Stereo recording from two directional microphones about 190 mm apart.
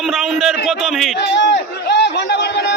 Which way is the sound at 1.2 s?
65° left (ahead or behind).